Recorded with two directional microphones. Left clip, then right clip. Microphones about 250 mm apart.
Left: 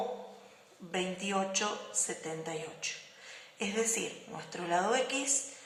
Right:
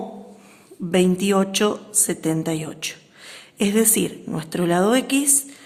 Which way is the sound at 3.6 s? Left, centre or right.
Right.